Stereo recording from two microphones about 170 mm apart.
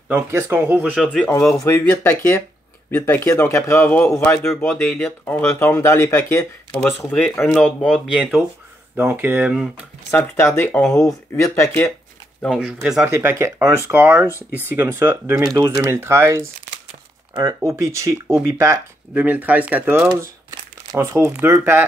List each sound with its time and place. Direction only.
0.1 s speech: 15° right (ahead or behind)
0.9 s speech: 5° left (ahead or behind)
4.5 s speech: 5° left (ahead or behind)
6.7 s speech: 5° left (ahead or behind)
10.1 s speech: 10° left (ahead or behind)
12.4 s speech: centre (ahead or behind)
13.0 s speech: 15° right (ahead or behind)